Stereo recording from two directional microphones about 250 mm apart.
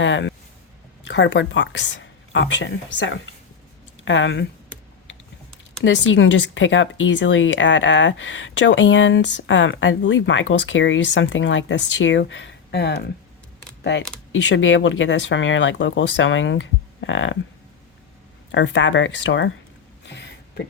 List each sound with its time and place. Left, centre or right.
0.0 s speech: left
5.8 s speech: left
14.4 s speech: left
18.5 s speech: left
20.1 s a sound: left